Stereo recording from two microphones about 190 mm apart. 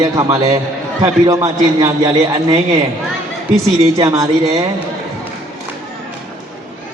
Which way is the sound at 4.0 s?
15° right (ahead or behind).